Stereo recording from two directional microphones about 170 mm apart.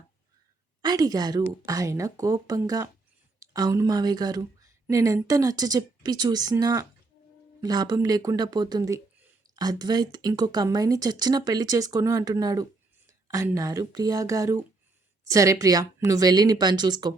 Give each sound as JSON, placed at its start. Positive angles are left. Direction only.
{"t": 0.8, "sound": "speech", "side_deg": -25}